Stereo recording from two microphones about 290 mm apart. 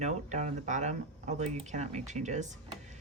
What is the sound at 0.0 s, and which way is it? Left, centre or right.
Speech, right.